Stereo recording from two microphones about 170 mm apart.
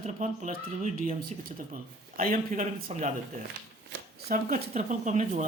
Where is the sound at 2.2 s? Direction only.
55° right (ahead or behind).